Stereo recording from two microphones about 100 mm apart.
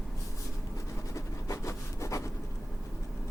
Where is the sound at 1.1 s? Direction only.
30° left (ahead or behind).